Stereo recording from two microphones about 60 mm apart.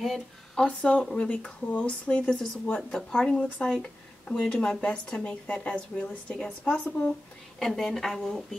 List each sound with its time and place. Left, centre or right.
0.6 s a woman's voice: centre
3.4 s a woman's voice: centre